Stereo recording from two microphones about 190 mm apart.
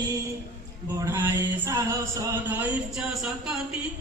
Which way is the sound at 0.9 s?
15° right (ahead or behind).